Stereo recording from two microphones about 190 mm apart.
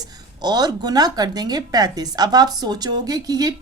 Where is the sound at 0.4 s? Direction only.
20° right (ahead or behind).